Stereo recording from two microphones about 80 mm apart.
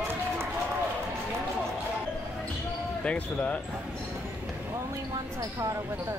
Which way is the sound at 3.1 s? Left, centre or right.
Centre.